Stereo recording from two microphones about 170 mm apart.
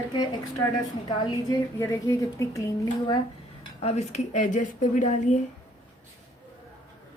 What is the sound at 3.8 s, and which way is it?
Speech, 40° left (ahead or behind).